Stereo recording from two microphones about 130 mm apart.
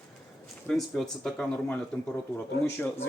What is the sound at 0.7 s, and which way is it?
Speech, centre (ahead or behind).